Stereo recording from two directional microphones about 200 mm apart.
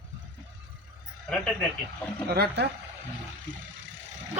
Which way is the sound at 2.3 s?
50° right (ahead or behind).